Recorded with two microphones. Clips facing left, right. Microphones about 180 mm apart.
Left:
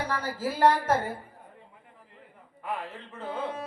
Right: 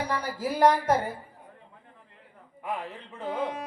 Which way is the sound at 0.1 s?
15° right (ahead or behind).